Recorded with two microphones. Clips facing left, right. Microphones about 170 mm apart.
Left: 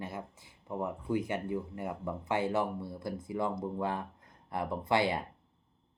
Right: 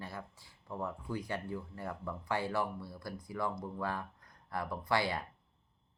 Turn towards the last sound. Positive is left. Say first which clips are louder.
# left 4 dB
turn(degrees=20)  # may be behind; listen again after turning